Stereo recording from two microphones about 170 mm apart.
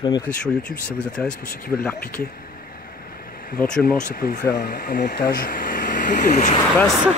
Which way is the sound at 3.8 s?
55° left (ahead or behind).